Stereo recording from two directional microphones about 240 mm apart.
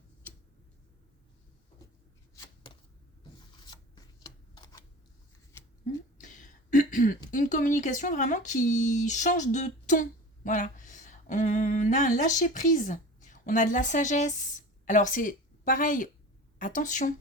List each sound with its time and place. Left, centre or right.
3.7 s shuffling cards: centre
5.8 s a sound: left
7.3 s a woman's voice: left